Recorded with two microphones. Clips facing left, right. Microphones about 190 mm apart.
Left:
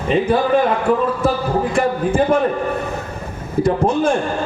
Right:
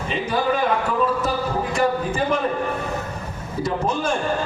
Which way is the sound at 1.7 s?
55° left (ahead or behind).